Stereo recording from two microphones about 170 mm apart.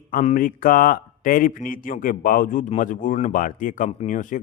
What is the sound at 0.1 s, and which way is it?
Speech, 50° left (ahead or behind).